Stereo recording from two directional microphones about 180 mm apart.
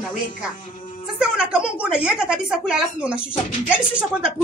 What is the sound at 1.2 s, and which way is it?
Speech, 5° right (ahead or behind).